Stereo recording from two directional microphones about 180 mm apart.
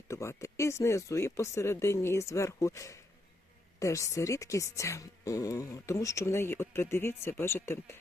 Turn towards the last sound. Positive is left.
turn(degrees=15)  # may be behind; listen again after turning